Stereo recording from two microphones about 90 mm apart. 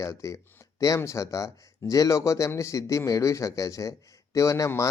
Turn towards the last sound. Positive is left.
turn(degrees=35)  # may be behind; listen again after turning